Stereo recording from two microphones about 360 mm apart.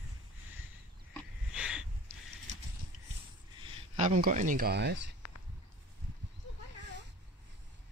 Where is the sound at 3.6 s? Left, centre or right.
Centre.